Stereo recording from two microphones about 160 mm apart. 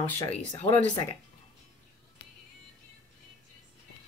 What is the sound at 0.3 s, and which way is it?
Speech, 40° left (ahead or behind).